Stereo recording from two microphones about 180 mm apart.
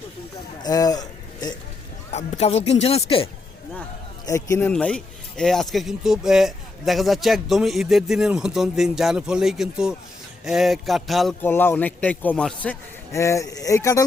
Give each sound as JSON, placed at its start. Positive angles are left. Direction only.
{"t": 0.6, "sound": "a man's voice", "side_deg": 20}
{"t": 2.1, "sound": "speech", "side_deg": 40}
{"t": 4.3, "sound": "a man's voice", "side_deg": 20}
{"t": 4.7, "sound": "speech", "side_deg": 5}
{"t": 11.4, "sound": "a man's voice", "side_deg": 10}